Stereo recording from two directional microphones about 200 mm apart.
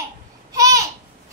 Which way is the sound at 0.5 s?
15° right (ahead or behind).